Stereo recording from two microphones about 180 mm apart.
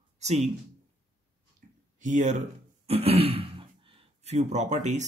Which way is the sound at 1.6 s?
45° right (ahead or behind).